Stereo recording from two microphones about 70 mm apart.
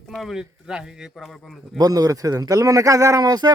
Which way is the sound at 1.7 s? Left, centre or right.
Right.